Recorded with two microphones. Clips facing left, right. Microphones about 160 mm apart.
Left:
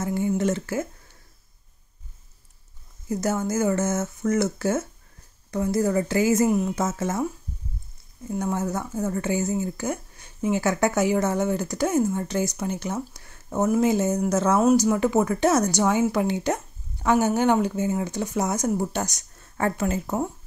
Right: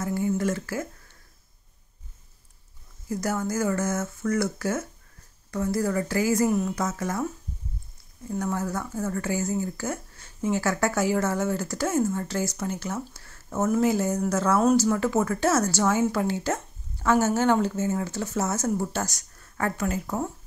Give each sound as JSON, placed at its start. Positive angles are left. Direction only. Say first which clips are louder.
{"t": 0.0, "sound": "speech", "louder": "left 2 dB", "side_deg": 20}
{"t": 3.1, "sound": "speech", "louder": "left 3 dB", "side_deg": 20}
{"t": 8.3, "sound": "a woman's voice", "louder": "left 2 dB", "side_deg": 20}